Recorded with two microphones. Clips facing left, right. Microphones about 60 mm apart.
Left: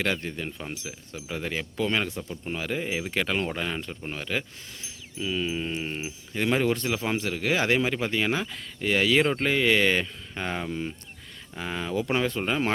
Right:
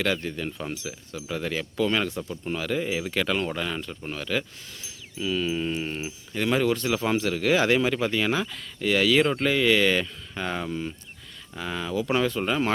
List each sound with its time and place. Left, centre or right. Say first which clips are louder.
0.0 s speech: right 2 dB; left
6.8 s speech: right 3 dB; centre